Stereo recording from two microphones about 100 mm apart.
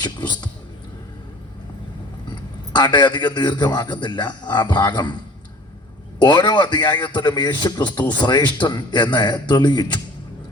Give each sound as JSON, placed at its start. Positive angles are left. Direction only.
{"t": 0.0, "sound": "a man's voice", "side_deg": 45}
{"t": 2.7, "sound": "a man's voice", "side_deg": 45}
{"t": 6.1, "sound": "a man's voice", "side_deg": 45}